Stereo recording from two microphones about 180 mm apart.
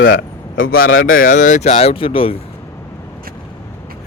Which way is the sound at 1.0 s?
50° left (ahead or behind).